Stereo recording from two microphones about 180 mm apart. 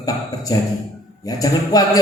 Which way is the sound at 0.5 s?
20° left (ahead or behind).